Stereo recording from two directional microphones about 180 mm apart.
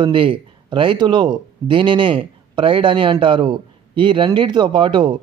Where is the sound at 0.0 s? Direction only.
30° right (ahead or behind).